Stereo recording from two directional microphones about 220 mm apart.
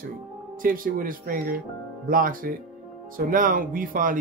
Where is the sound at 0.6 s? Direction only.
40° right (ahead or behind).